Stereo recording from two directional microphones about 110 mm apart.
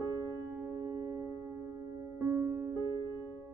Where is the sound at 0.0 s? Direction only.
25° right (ahead or behind).